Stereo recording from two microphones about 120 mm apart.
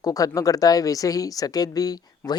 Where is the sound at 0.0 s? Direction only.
30° left (ahead or behind).